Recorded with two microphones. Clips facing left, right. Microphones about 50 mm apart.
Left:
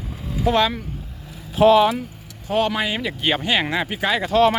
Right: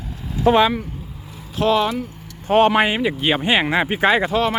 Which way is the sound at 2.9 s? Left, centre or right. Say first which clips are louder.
Right 3 dB; centre.